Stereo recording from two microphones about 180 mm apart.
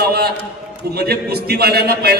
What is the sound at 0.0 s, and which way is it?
A man's voice, 60° right (ahead or behind).